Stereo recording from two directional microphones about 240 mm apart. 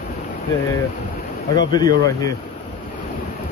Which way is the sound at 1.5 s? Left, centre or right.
Centre.